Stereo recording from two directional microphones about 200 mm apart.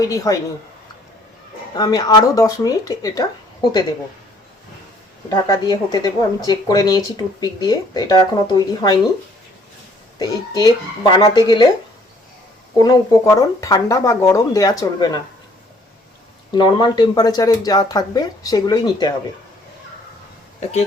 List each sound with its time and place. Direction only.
0.0 s speech: 15° left (ahead or behind)
1.7 s speech: 20° left (ahead or behind)
5.3 s speech: 20° left (ahead or behind)
10.2 s speech: 20° left (ahead or behind)
12.8 s speech: 15° left (ahead or behind)
16.6 s speech: 20° left (ahead or behind)